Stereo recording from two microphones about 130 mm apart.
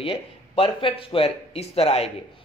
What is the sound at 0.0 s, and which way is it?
A woman's voice, 45° left (ahead or behind).